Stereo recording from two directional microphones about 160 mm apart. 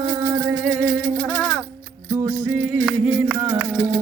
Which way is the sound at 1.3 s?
10° left (ahead or behind).